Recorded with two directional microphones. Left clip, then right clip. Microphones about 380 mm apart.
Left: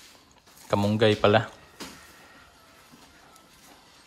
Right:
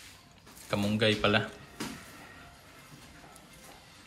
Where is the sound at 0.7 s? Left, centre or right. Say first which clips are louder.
Left 6 dB; left.